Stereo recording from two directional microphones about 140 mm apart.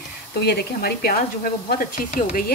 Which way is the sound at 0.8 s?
90° left.